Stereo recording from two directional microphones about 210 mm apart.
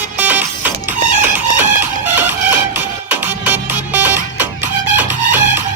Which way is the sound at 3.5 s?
10° right (ahead or behind).